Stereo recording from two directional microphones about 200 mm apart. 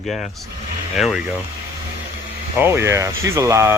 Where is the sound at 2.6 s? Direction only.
10° right (ahead or behind).